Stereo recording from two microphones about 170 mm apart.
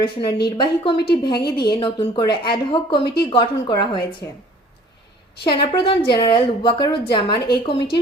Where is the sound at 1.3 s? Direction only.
70° left (ahead or behind).